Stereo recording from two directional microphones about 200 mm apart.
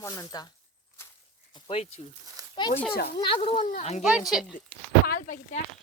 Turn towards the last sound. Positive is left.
turn(degrees=40)  # may be behind; listen again after turning